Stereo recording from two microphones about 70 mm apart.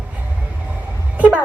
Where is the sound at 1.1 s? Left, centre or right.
Right.